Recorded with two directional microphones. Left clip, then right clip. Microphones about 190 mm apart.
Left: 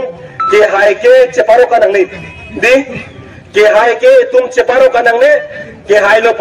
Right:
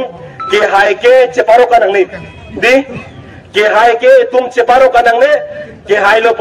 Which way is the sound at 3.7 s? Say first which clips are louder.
Right 2 dB; 40° left (ahead or behind).